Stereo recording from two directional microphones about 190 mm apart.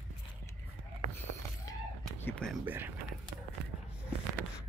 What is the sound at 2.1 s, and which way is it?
Speech, 10° left (ahead or behind).